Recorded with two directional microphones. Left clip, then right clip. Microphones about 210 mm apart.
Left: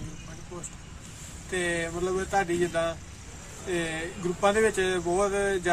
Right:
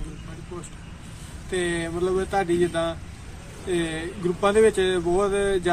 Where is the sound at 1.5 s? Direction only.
15° left (ahead or behind).